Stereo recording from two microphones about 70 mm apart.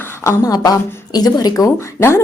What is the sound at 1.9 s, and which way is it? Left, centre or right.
Speech, left.